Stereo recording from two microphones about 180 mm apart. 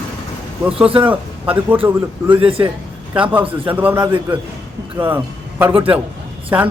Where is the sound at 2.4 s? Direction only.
30° right (ahead or behind).